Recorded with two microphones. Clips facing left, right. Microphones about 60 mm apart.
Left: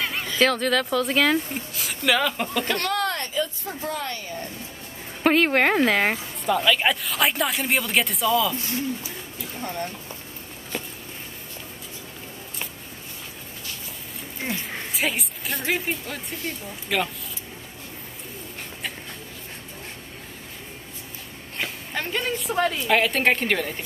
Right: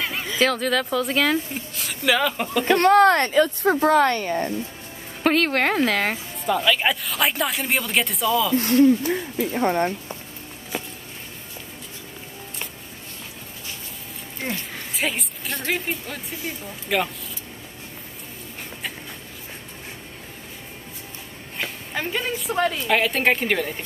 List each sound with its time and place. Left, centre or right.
0.0 s a sound: centre
0.3 s speech: centre
2.6 s speech: right
2.9 s speech: right
5.2 s a woman's voice: centre
6.5 s speech: centre
8.5 s speech: right
10.7 s a sound: centre
14.4 s speech: centre
21.5 s a woman's voice: centre